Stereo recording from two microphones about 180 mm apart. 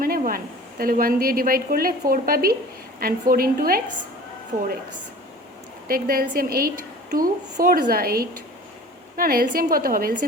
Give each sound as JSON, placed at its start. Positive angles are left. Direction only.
{"t": 0.0, "sound": "a woman's voice", "side_deg": -55}
{"t": 5.9, "sound": "a woman's voice", "side_deg": -55}